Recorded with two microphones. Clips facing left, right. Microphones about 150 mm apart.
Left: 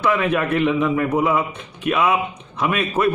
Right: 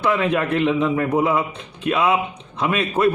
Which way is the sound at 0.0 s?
25° right (ahead or behind).